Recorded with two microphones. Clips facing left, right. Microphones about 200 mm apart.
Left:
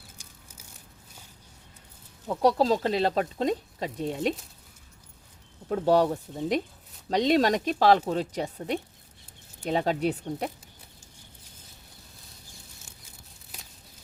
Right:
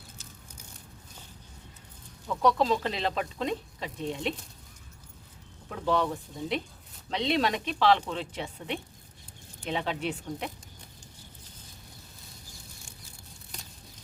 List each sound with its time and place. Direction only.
0.2 s a sound: 15° left (ahead or behind)
2.2 s speech: 35° left (ahead or behind)
5.6 s speech: 40° left (ahead or behind)